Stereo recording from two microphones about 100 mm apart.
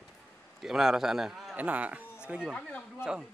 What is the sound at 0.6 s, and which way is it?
Speech, 5° right (ahead or behind).